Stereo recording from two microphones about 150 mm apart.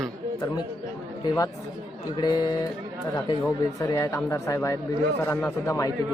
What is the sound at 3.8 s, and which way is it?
Speech, 20° left (ahead or behind).